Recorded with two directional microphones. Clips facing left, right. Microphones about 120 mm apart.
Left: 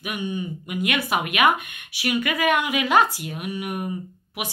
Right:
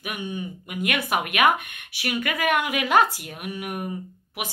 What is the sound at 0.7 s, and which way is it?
A woman's voice, 45° right (ahead or behind).